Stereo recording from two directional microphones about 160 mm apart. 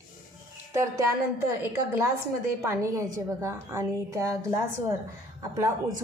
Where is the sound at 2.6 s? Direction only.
20° right (ahead or behind).